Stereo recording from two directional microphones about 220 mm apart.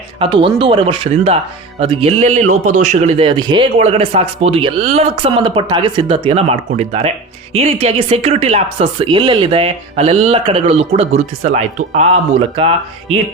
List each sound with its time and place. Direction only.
0.2 s speech: 20° right (ahead or behind)